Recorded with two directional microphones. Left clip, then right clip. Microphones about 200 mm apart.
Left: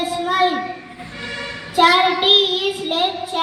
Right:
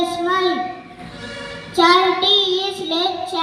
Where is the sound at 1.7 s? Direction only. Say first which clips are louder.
Even; 40° left (ahead or behind).